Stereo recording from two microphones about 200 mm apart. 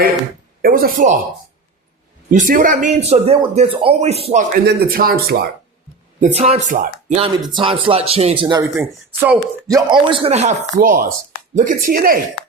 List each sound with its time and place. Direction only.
0.6 s speech: 45° right (ahead or behind)
2.3 s speech: 40° right (ahead or behind)
4.5 s speech: 45° right (ahead or behind)
6.1 s speech: 35° right (ahead or behind)
7.2 s speech: 25° right (ahead or behind)
9.2 s speech: 15° right (ahead or behind); by 10.5 s 30° right (ahead or behind)
10.8 s speech: 45° right (ahead or behind)